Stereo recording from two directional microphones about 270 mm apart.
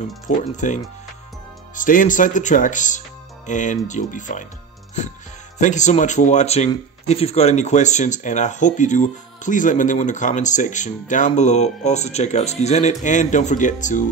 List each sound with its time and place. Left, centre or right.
0.6 s speech: left
5.6 s speech: left